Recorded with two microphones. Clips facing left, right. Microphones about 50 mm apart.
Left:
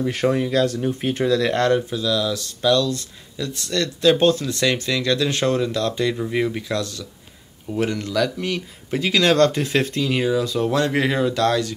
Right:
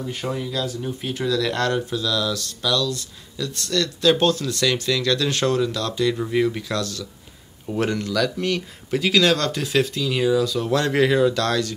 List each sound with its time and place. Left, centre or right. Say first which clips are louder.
0.0 s speech: left 8 dB; left
0.3 s speech: left 5 dB; left; by 2.7 s centre
2.7 s speech: left 4 dB; left
3.5 s speech: right 1 dB; centre
7.7 s speech: even; centre
8.1 s speech: even; centre
9.3 s speech: left 4 dB; left
10.1 s speech: right 2 dB; left